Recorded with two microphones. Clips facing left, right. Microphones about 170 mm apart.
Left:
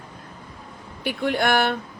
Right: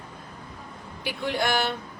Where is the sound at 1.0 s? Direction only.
55° left (ahead or behind).